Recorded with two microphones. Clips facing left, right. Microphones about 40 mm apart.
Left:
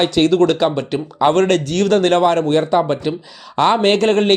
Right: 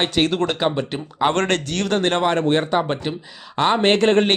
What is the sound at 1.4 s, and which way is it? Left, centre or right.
Speech, right.